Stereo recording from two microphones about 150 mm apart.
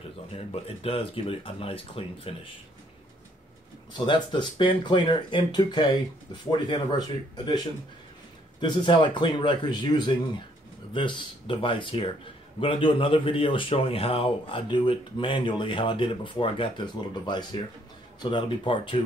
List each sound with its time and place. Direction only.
0.4 s a man's voice: 40° left (ahead or behind)
3.9 s a man's voice: 35° left (ahead or behind)